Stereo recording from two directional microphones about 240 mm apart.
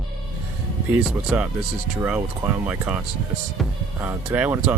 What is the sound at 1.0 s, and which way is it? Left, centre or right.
Speech, centre.